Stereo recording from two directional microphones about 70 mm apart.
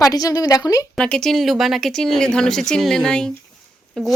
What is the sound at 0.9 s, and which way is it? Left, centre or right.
Speech, centre.